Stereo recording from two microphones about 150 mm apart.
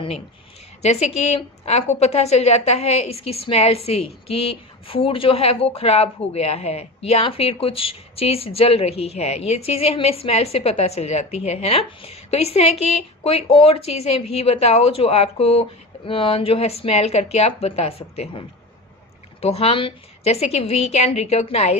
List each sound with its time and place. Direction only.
0.8 s a woman's voice: 45° left (ahead or behind)
19.4 s a woman's voice: 40° left (ahead or behind)